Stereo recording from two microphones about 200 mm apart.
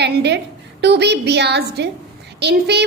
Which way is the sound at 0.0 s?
55° right (ahead or behind).